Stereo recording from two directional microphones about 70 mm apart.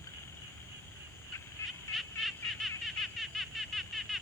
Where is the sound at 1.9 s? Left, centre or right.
Centre.